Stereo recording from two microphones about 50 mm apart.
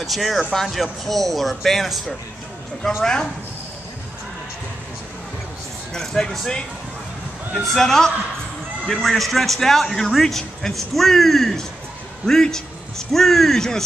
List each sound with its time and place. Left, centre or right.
0.0 s speech: centre
3.0 s speech: centre
5.9 s speech: centre
7.6 s speech: centre